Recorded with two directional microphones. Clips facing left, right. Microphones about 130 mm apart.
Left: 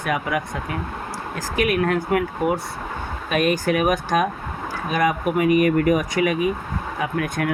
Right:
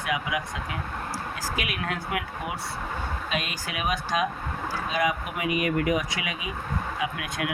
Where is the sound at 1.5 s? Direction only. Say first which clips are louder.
Left 14 dB; 45° left (ahead or behind).